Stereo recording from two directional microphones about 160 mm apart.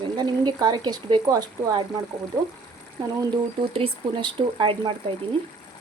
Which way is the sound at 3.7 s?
35° right (ahead or behind).